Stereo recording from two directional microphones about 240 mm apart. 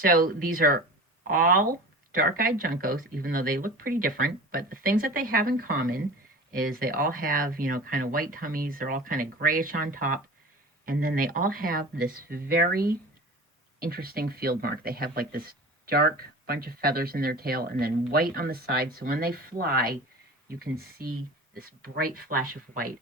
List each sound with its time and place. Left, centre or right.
0.0 s speech: right